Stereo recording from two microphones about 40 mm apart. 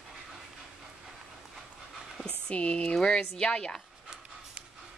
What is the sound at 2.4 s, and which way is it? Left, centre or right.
A woman's voice, left.